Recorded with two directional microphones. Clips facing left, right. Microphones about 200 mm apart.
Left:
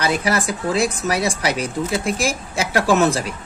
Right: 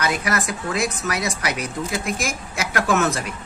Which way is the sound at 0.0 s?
30° left (ahead or behind).